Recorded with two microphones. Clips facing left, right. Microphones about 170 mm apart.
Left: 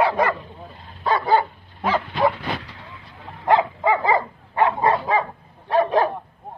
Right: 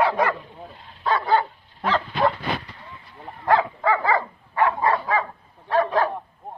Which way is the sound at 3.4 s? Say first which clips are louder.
Left 2 dB; 20° left (ahead or behind).